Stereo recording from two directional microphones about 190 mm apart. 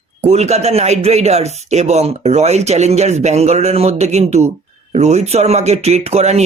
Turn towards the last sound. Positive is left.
turn(degrees=-35)  # may be behind; listen again after turning